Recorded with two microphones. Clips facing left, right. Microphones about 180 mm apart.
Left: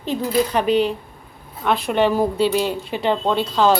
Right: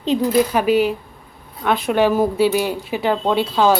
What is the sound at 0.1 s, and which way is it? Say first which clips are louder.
Speech: right 3 dB; 15° right (ahead or behind).